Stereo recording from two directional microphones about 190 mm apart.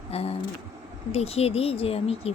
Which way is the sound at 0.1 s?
30° left (ahead or behind).